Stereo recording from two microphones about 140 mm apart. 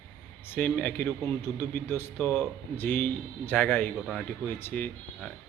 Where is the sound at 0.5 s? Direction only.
10° left (ahead or behind).